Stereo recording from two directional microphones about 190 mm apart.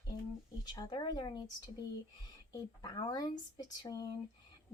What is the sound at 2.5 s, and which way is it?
Speech, 20° left (ahead or behind).